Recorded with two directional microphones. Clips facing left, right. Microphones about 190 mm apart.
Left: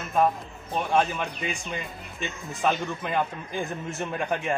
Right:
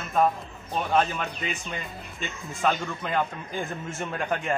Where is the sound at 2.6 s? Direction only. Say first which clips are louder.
Even; 10° left (ahead or behind).